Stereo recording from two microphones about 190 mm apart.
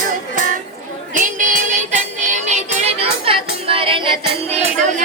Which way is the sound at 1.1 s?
45° right (ahead or behind).